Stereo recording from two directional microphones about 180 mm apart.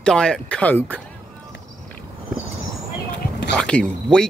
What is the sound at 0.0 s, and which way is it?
Speech, 5° left (ahead or behind).